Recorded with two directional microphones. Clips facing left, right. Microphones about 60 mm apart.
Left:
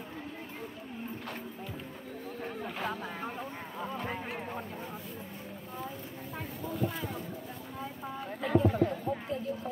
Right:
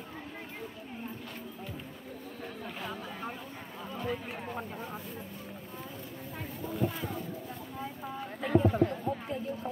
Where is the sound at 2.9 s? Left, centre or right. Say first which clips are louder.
Left 2 dB; left.